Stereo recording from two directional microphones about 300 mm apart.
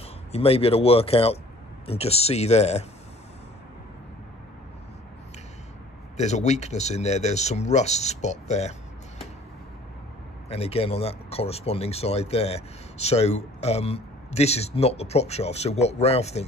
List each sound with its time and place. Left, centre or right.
0.3 s speech: centre
6.1 s speech: left
10.5 s speech: centre